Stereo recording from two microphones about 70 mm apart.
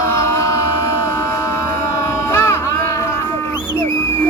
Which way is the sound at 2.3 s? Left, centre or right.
Left.